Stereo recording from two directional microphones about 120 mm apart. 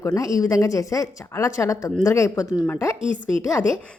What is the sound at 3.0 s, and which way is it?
Speech, 90° left.